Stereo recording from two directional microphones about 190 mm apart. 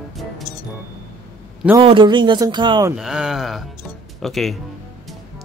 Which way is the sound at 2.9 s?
Centre (ahead or behind).